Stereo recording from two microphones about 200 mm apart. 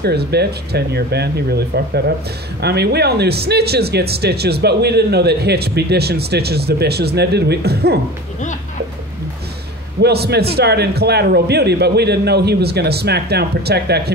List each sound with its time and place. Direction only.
0.0 s speech: 55° right (ahead or behind)
10.0 s a man's voice: 55° right (ahead or behind)